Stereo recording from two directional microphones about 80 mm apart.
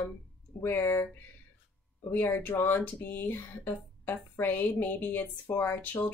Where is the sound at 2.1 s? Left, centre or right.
Left.